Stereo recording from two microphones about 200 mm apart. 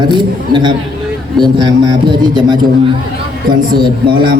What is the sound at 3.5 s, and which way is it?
Speech, 20° right (ahead or behind).